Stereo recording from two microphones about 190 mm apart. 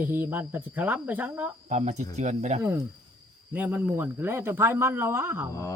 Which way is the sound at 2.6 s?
15° right (ahead or behind).